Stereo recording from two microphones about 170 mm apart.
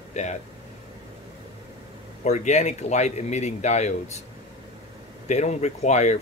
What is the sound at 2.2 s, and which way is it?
Speech, 40° left (ahead or behind).